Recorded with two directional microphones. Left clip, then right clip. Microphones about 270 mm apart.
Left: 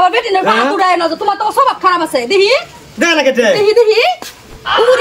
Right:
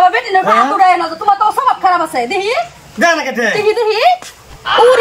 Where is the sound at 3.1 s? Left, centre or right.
Left.